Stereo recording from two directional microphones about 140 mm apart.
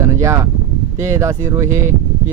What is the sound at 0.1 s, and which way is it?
Speech, 20° right (ahead or behind).